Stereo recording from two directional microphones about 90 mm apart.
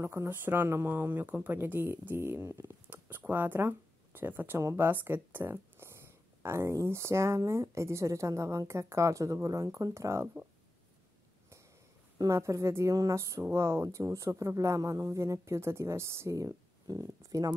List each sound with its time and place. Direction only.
0.0 s speech: 30° right (ahead or behind)
12.2 s speech: 35° right (ahead or behind)